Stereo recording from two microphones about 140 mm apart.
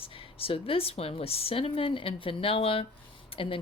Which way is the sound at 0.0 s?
40° left (ahead or behind).